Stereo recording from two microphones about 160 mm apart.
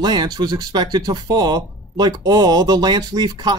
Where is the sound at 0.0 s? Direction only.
25° right (ahead or behind).